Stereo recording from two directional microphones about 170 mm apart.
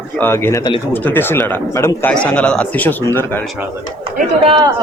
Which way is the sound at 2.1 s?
5° left (ahead or behind).